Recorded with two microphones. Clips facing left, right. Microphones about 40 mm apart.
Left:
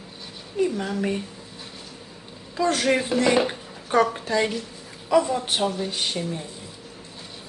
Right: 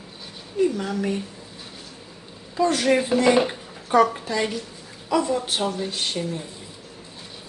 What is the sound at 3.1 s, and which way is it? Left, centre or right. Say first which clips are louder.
Speech: right 2 dB; centre.